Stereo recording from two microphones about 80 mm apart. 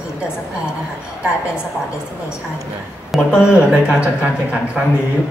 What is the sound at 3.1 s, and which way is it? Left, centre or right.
Speech, centre.